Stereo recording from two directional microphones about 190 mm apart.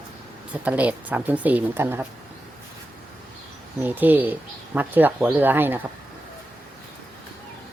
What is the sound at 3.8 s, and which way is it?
Speech, 10° right (ahead or behind).